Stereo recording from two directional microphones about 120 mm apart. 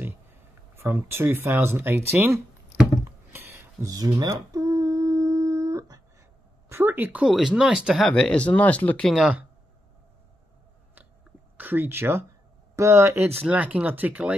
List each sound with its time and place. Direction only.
0.7 s a sound: 20° right (ahead or behind)
6.7 s speech: 15° right (ahead or behind)
8.1 s speech: 10° left (ahead or behind)
9.1 s speech: 5° right (ahead or behind)
11.5 s speech: 15° right (ahead or behind)